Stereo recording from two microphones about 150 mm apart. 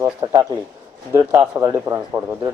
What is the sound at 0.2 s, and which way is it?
Speech, 25° right (ahead or behind).